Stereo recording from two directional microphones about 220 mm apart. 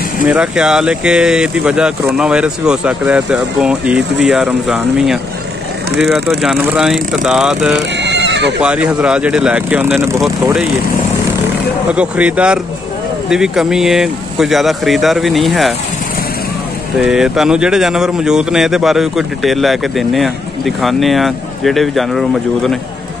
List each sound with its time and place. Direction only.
0.3 s speech: 5° right (ahead or behind)
8.0 s goat: 50° right (ahead or behind)
8.5 s speech: 5° right (ahead or behind)
11.9 s speech: 5° right (ahead or behind)
17.0 s speech: centre (ahead or behind)